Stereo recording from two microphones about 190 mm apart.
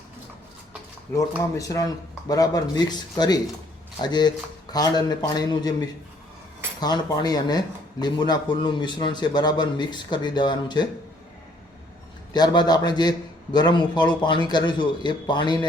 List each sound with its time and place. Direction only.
1.1 s a man's voice: 15° left (ahead or behind)
12.3 s a man's voice: 20° left (ahead or behind)